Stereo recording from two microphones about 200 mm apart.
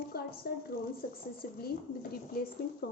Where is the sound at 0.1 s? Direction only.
50° left (ahead or behind).